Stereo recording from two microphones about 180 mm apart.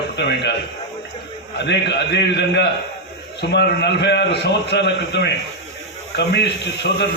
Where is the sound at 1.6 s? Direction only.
70° left (ahead or behind).